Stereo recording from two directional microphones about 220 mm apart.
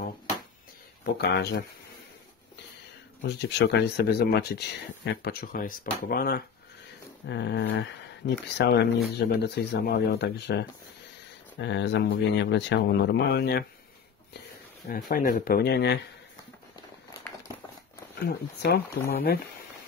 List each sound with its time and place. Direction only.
1.1 s speech: 50° left (ahead or behind)
3.2 s speech: 50° left (ahead or behind)
7.2 s speech: 55° left (ahead or behind)
14.9 s speech: 40° left (ahead or behind)
18.1 s speech: 50° left (ahead or behind)